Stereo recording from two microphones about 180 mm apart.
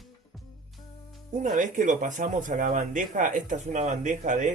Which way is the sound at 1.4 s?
45° right (ahead or behind).